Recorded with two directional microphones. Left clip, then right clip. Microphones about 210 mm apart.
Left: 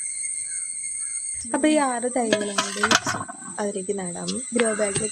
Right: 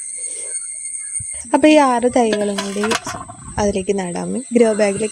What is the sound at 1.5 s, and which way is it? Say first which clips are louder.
Speech: right 10 dB; 35° right (ahead or behind).